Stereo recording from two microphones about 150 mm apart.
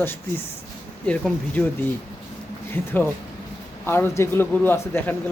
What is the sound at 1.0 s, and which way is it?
Speech, 5° left (ahead or behind).